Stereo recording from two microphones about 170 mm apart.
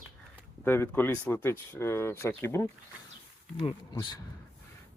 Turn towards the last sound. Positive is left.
turn(degrees=25)  # may be behind; listen again after turning